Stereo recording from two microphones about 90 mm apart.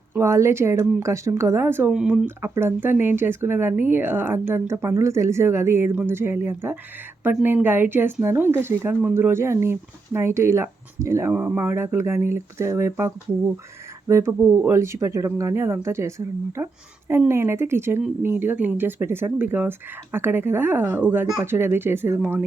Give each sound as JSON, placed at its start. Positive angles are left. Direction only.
{"t": 0.2, "sound": "speech", "side_deg": -30}
{"t": 1.9, "sound": "speech", "side_deg": -10}
{"t": 2.2, "sound": "speech", "side_deg": -25}